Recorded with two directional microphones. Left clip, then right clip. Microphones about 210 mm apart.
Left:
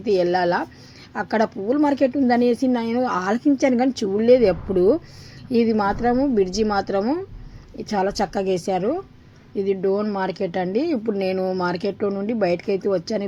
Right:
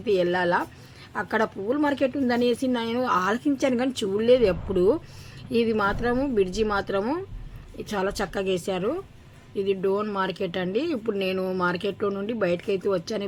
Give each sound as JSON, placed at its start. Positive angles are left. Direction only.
{"t": 0.0, "sound": "a woman's voice", "side_deg": 5}